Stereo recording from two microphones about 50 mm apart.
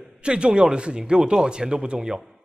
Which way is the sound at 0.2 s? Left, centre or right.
Centre.